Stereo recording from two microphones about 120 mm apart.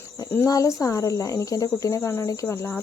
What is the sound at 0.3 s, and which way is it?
Speech, 25° left (ahead or behind).